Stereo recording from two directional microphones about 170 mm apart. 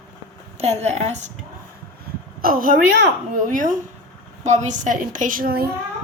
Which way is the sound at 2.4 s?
55° right (ahead or behind).